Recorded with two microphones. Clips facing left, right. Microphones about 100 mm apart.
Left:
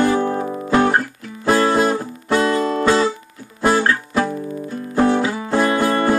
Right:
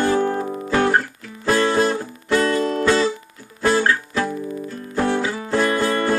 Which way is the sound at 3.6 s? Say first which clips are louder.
Left 1 dB; 25° left (ahead or behind).